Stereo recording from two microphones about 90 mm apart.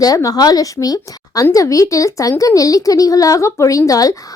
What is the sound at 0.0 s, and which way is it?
Speech, 40° left (ahead or behind).